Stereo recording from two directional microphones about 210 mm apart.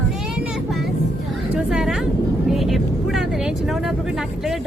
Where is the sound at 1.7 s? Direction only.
Centre (ahead or behind).